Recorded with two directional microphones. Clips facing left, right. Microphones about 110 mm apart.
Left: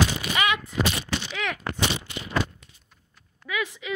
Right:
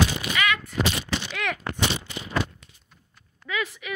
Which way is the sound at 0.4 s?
20° left (ahead or behind).